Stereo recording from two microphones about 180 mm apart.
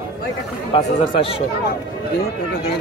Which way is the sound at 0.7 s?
30° left (ahead or behind).